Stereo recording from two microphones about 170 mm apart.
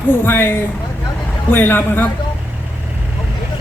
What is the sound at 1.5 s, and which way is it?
Speech, 10° left (ahead or behind).